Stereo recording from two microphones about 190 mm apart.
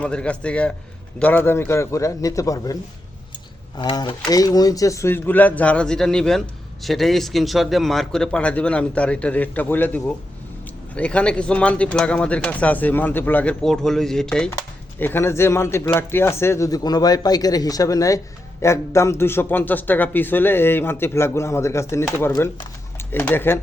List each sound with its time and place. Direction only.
0.0 s a man's voice: 5° left (ahead or behind)
3.8 s a man's voice: 25° left (ahead or behind)